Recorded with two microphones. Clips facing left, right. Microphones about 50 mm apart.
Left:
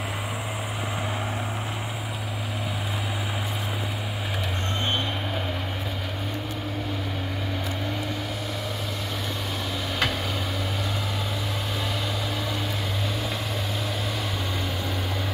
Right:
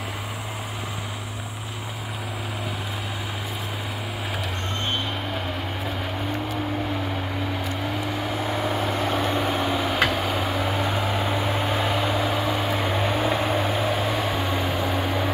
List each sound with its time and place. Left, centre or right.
8.5 s vehicle: right
9.9 s vehicle: centre